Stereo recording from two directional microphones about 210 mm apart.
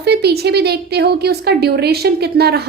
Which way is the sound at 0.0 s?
50° right (ahead or behind).